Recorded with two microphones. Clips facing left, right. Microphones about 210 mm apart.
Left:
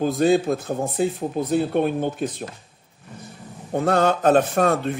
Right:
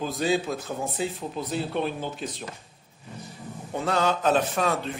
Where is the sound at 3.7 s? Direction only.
55° left (ahead or behind).